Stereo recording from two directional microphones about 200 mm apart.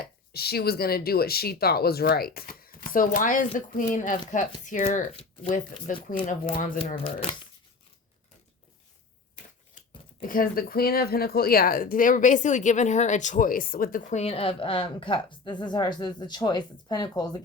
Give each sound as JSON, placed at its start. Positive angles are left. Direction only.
{"t": 0.0, "sound": "speech", "side_deg": 50}
{"t": 6.6, "sound": "speech", "side_deg": 40}
{"t": 10.2, "sound": "speech", "side_deg": 45}